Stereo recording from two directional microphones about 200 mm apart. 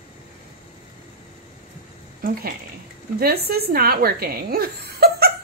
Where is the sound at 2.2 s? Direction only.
45° right (ahead or behind).